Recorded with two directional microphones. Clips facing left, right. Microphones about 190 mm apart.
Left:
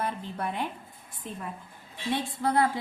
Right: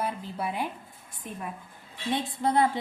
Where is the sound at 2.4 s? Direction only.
20° right (ahead or behind).